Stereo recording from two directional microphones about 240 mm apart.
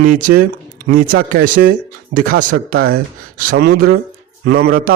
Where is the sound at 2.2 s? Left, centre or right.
Right.